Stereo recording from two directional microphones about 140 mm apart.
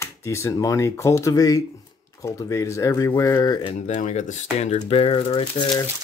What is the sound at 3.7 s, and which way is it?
Speech, 60° left (ahead or behind).